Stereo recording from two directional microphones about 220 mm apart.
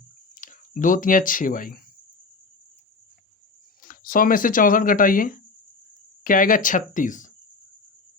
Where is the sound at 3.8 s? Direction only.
40° left (ahead or behind).